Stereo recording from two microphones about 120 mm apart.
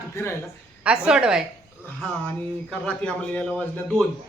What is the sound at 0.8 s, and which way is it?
Speech, 5° right (ahead or behind).